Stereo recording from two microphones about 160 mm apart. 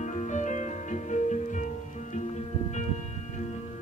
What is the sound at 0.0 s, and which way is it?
Music, 50° left (ahead or behind).